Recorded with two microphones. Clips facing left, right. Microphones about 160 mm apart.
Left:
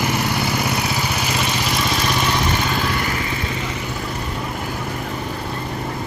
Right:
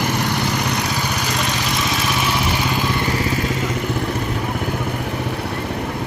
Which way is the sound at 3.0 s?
30° right (ahead or behind).